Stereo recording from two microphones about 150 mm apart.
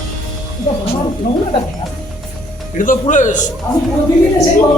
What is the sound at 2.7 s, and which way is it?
Speech, 65° left (ahead or behind).